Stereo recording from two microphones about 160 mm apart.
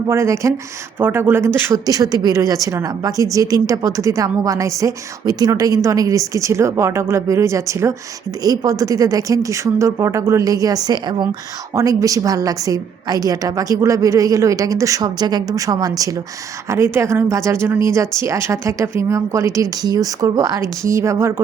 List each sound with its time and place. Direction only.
0.1 s a woman's voice: 20° right (ahead or behind)